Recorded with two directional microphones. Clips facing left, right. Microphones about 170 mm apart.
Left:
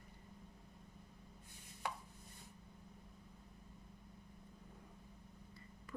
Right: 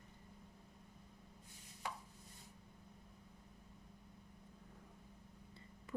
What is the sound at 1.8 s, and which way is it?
Chopping, 60° left (ahead or behind).